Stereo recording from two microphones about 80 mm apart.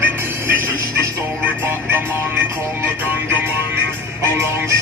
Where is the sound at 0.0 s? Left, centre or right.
Right.